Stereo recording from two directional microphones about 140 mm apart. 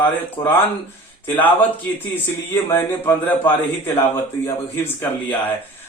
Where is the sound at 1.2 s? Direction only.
15° left (ahead or behind).